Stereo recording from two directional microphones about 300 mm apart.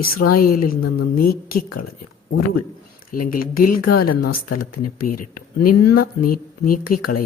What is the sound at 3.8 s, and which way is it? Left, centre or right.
Speech, left.